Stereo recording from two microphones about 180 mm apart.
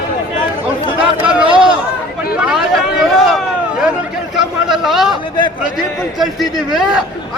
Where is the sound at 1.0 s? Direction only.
5° right (ahead or behind).